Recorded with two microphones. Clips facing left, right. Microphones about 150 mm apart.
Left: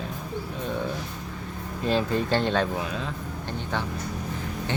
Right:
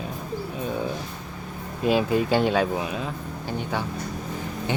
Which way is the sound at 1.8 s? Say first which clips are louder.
Right 3 dB; 10° right (ahead or behind).